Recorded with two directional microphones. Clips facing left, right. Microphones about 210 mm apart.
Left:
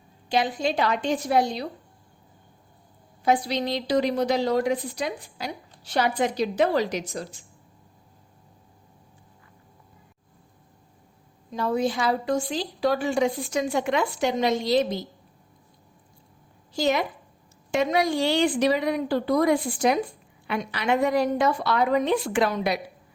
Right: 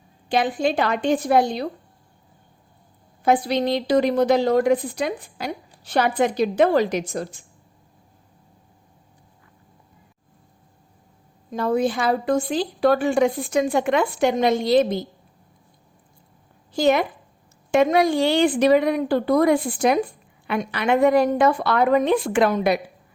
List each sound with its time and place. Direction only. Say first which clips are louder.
0.3 s a woman's voice: right 4 dB; 55° right (ahead or behind)
3.2 s a woman's voice: right 4 dB; 55° right (ahead or behind)
11.5 s a woman's voice: right 4 dB; 55° right (ahead or behind)
16.7 s speech: right 5 dB; 55° right (ahead or behind)